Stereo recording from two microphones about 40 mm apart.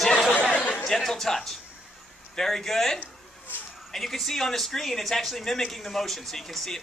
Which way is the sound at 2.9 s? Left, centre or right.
Left.